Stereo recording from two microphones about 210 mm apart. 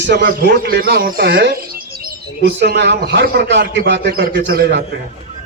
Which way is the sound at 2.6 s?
55° right (ahead or behind).